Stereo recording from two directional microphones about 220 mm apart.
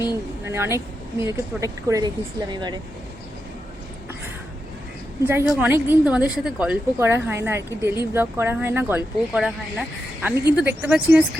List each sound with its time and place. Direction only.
0.4 s a woman's voice: 10° right (ahead or behind)
5.2 s a woman's voice: 10° right (ahead or behind)